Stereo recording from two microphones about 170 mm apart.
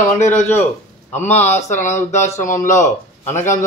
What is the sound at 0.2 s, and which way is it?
Speech, 45° left (ahead or behind).